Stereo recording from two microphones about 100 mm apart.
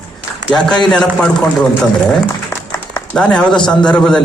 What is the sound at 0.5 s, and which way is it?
A man's voice, 5° left (ahead or behind).